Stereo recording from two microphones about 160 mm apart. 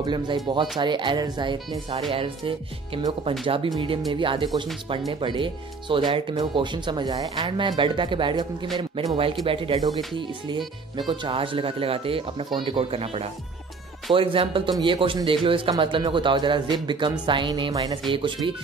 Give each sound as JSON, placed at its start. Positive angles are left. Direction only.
{"t": 0.0, "sound": "speech", "side_deg": -30}